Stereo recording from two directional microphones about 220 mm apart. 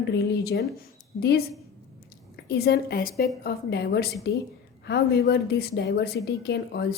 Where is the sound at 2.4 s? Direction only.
45° left (ahead or behind).